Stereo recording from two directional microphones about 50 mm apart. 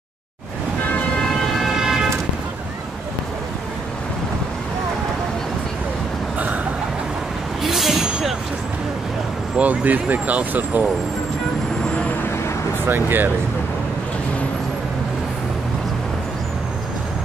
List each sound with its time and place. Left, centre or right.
1.7 s vehicle: centre
6.3 s a sound: right
7.6 s vehicle: centre
9.6 s speech: right
12.8 s speech: right